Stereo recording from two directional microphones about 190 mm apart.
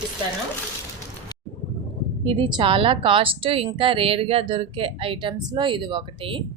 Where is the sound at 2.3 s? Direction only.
25° right (ahead or behind).